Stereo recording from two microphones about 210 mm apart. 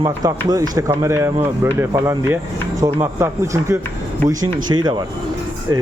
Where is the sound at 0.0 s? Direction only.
20° right (ahead or behind).